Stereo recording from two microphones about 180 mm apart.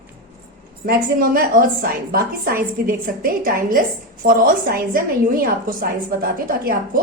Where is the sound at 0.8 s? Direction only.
55° right (ahead or behind).